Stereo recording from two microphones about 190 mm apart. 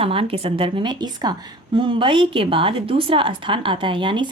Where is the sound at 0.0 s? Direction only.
30° right (ahead or behind).